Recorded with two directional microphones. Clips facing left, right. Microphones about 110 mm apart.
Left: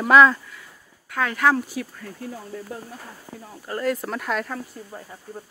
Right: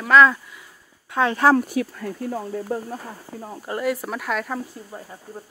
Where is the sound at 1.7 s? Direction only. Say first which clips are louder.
Right 7 dB; 55° right (ahead or behind).